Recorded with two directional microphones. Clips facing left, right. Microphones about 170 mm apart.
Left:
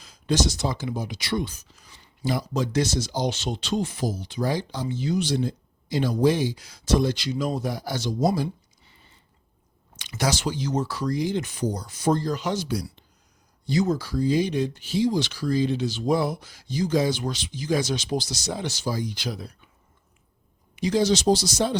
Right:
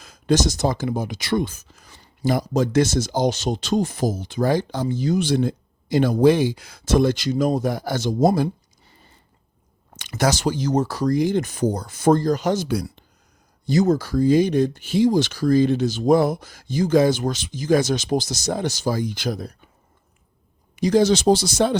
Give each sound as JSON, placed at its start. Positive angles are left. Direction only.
{"t": 0.0, "sound": "speech", "side_deg": -50}
{"t": 13.7, "sound": "speech", "side_deg": -45}
{"t": 20.7, "sound": "speech", "side_deg": -45}